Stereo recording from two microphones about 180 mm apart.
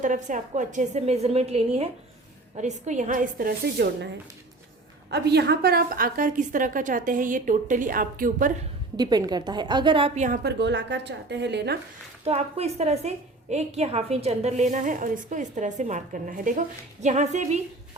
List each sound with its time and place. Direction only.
0.0 s a woman's voice: 45° right (ahead or behind)
5.1 s a woman's voice: 65° right (ahead or behind); by 8.5 s 50° right (ahead or behind)
9.0 s a woman's voice: 20° right (ahead or behind)
10.2 s a woman's voice: 50° right (ahead or behind)
10.5 s a woman's voice: 75° right (ahead or behind)
12.2 s a woman's voice: 35° right (ahead or behind)